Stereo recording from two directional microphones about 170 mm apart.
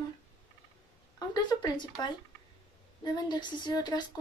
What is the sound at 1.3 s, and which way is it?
Speech, 25° left (ahead or behind).